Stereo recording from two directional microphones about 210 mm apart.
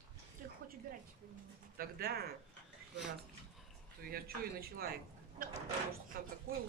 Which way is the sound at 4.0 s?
45° right (ahead or behind).